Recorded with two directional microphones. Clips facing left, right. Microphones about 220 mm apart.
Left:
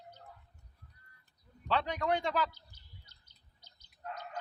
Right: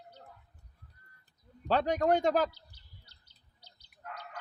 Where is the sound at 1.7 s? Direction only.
45° right (ahead or behind).